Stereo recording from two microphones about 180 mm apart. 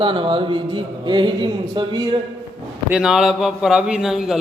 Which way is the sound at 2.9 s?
5° right (ahead or behind).